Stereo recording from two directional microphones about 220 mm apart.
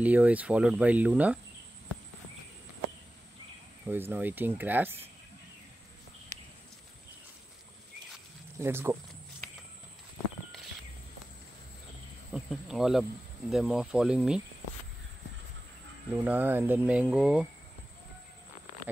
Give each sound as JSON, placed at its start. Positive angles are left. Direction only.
{"t": 0.0, "sound": "speech", "side_deg": -5}
{"t": 3.9, "sound": "speech", "side_deg": -10}
{"t": 8.5, "sound": "speech", "side_deg": -10}
{"t": 12.3, "sound": "speech", "side_deg": 0}
{"t": 16.1, "sound": "speech", "side_deg": -10}